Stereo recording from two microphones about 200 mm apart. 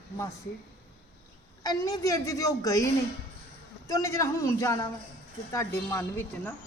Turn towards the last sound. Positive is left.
turn(degrees=10)  # may be behind; listen again after turning